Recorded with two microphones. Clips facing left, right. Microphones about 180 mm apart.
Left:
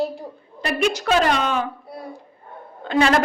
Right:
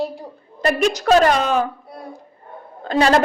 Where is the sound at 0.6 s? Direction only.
45° right (ahead or behind).